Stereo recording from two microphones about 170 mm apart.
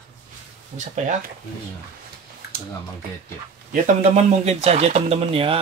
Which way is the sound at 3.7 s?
45° right (ahead or behind).